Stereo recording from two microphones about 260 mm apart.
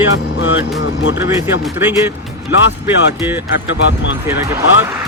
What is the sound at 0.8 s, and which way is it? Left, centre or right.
Speech, left.